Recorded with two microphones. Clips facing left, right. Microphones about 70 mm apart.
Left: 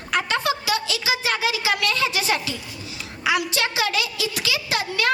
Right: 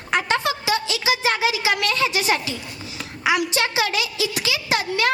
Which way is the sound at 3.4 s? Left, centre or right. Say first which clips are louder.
Right 2 dB; right.